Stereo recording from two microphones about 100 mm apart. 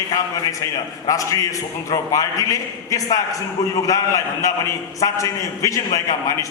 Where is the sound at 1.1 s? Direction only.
35° left (ahead or behind).